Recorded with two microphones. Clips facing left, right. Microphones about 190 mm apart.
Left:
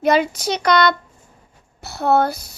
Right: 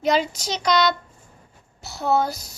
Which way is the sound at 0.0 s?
60° left (ahead or behind).